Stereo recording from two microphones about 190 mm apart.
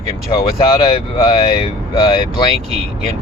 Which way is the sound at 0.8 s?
25° left (ahead or behind).